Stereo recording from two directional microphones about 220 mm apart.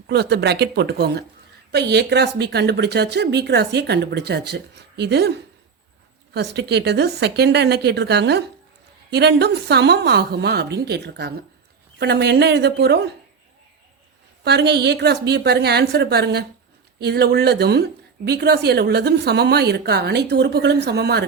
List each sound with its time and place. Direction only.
0.1 s a woman's voice: 50° right (ahead or behind)
6.3 s a woman's voice: 50° right (ahead or behind)
14.4 s a woman's voice: 50° right (ahead or behind)